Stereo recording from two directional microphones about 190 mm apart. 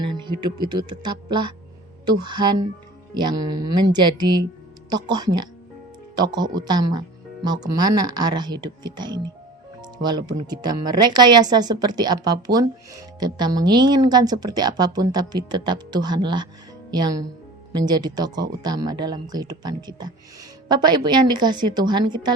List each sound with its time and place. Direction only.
0.0 s a woman's voice: 25° right (ahead or behind)